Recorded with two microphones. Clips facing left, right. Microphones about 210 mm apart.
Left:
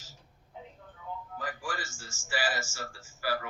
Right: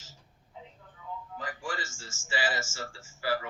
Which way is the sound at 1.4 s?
25° right (ahead or behind).